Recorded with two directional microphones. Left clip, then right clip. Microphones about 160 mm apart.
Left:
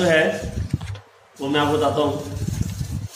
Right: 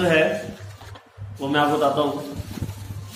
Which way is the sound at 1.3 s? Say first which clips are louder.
Even; 5° left (ahead or behind).